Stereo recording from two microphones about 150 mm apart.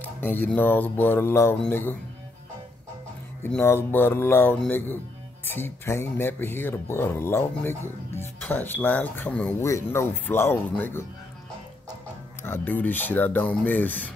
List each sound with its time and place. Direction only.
0.0 s speech: 10° left (ahead or behind)
3.4 s speech: 15° left (ahead or behind)
12.4 s speech: 15° left (ahead or behind)